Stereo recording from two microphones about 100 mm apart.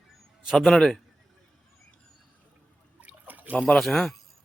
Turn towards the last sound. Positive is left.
turn(degrees=0)  # may be behind; listen again after turning